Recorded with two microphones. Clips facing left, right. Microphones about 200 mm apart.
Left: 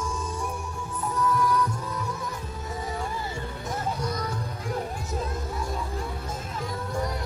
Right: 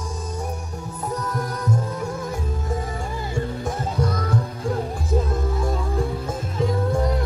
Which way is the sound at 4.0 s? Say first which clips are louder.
Right 6 dB; 55° right (ahead or behind).